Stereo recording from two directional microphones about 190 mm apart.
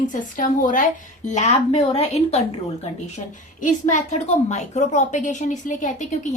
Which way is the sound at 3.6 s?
40° left (ahead or behind).